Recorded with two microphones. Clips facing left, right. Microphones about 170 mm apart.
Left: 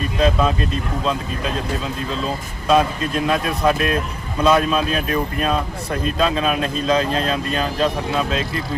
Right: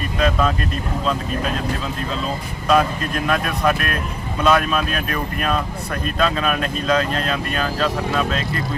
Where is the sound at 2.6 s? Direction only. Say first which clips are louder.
Left 1 dB; 25° left (ahead or behind).